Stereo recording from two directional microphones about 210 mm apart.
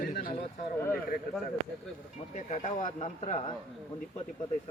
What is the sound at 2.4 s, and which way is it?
Speech, 35° left (ahead or behind).